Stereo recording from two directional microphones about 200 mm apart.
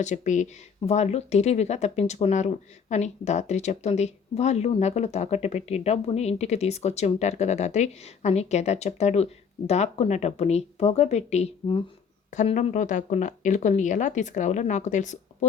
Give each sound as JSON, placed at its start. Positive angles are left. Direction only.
{"t": 0.0, "sound": "speech", "side_deg": 35}